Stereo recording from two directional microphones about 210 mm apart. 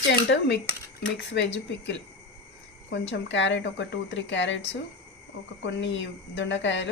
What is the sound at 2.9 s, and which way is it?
A woman's voice, 60° left (ahead or behind).